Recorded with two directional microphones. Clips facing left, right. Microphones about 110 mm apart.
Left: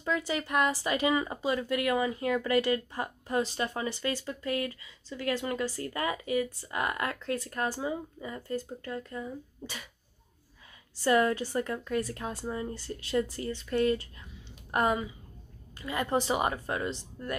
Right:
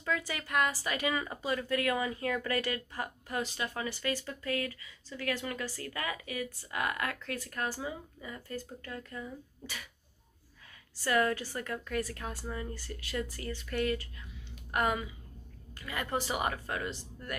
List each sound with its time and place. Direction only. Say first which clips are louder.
0.0 s speech: left 4 dB; 20° left (ahead or behind)
11.1 s speech: left 4 dB; 25° left (ahead or behind)
14.5 s a sound: left 3 dB; 30° left (ahead or behind)
15.8 s speech: left 5 dB; 25° left (ahead or behind)